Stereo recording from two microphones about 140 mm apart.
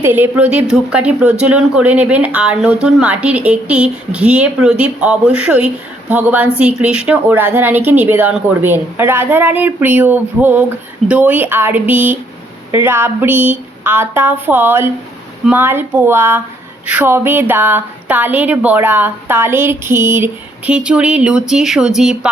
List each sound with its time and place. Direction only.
0.0 s speech: 15° right (ahead or behind)